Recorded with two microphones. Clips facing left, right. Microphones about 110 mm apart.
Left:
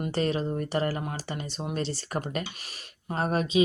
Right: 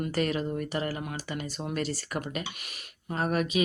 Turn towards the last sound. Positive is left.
turn(degrees=30)  # may be behind; listen again after turning